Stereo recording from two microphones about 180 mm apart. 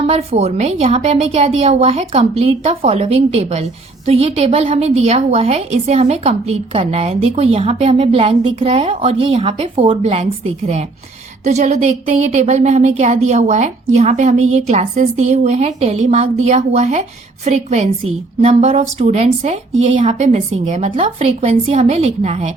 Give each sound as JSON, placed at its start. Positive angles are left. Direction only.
{"t": 0.1, "sound": "a woman's voice", "side_deg": -35}
{"t": 11.4, "sound": "a woman's voice", "side_deg": -40}